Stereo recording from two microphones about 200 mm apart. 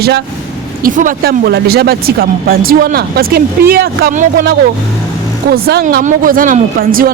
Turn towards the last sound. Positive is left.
turn(degrees=-45)  # may be behind; listen again after turning